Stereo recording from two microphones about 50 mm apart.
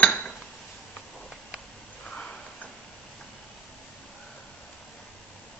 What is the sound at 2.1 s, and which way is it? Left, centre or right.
Sniff, centre.